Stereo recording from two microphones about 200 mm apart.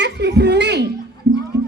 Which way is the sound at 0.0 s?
55° right (ahead or behind).